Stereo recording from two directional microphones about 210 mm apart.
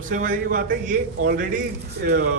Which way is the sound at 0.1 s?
40° right (ahead or behind).